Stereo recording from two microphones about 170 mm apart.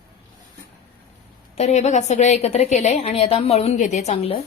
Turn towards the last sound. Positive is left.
turn(degrees=40)  # may be behind; listen again after turning